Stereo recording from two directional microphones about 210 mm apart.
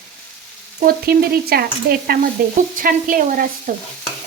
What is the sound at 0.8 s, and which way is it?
Stir, 45° right (ahead or behind).